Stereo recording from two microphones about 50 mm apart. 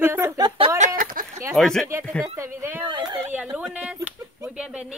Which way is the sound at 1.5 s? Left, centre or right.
Centre.